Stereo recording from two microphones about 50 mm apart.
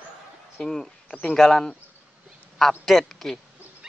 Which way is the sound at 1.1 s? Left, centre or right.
Left.